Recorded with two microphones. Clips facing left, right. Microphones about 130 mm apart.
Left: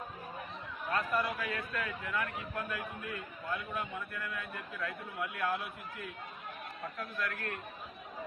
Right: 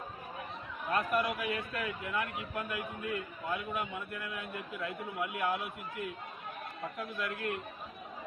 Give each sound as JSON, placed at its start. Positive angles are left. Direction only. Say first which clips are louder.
{"t": 0.9, "sound": "a man's voice", "louder": "right 2 dB", "side_deg": -15}